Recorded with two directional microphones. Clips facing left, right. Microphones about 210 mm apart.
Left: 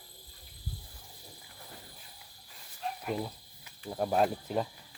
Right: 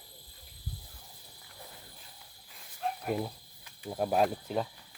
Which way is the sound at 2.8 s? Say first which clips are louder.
Right 3 dB; 55° right (ahead or behind).